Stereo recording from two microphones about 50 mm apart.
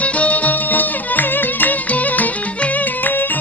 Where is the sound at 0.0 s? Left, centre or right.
Left.